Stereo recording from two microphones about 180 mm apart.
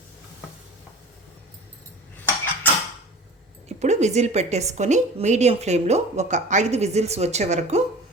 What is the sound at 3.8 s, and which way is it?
A woman's voice, 40° right (ahead or behind).